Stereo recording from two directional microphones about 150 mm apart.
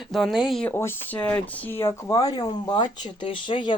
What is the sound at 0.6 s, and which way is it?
Speech, 15° left (ahead or behind).